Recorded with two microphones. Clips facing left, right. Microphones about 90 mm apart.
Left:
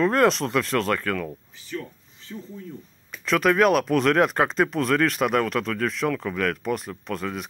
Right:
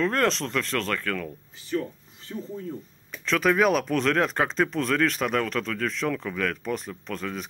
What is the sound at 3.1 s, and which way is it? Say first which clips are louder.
Speech: left 2 dB; 5° left (ahead or behind).